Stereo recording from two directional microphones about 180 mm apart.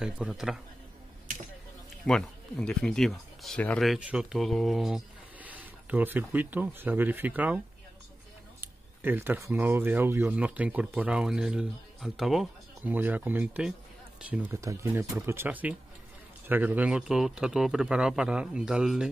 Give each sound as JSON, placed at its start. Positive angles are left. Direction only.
{"t": 0.0, "sound": "speech", "side_deg": -5}
{"t": 2.0, "sound": "speech", "side_deg": 0}